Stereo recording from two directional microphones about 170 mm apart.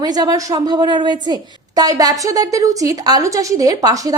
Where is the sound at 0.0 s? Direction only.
20° right (ahead or behind).